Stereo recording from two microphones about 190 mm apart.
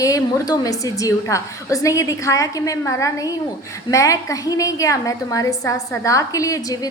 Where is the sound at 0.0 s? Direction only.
15° left (ahead or behind).